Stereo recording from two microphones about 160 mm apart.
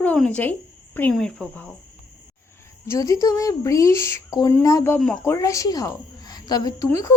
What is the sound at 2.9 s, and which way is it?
A woman's voice, 20° left (ahead or behind).